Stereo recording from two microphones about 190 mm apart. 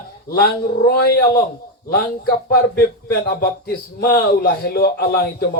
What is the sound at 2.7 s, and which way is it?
Music, 55° left (ahead or behind).